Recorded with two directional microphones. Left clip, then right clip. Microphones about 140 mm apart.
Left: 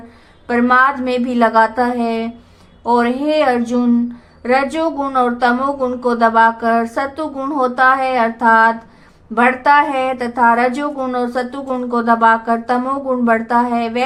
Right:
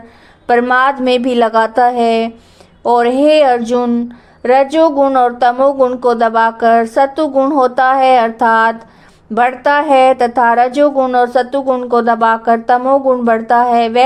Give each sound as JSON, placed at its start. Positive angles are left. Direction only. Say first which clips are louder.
{"t": 0.7, "sound": "speech", "louder": "right 2 dB", "side_deg": -65}
{"t": 4.4, "sound": "speech", "louder": "right 5 dB", "side_deg": -60}
{"t": 4.7, "sound": "speech", "louder": "right 8 dB", "side_deg": -45}
{"t": 12.8, "sound": "speech", "louder": "right 7 dB", "side_deg": -45}